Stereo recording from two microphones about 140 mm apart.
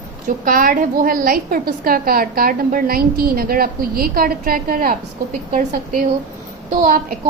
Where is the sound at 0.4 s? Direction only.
85° right.